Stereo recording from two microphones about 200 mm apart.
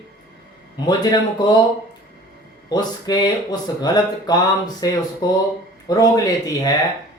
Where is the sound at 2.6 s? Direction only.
20° left (ahead or behind).